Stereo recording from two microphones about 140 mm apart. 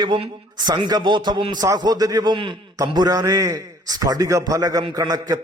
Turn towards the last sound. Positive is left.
turn(degrees=-30)  # may be behind; listen again after turning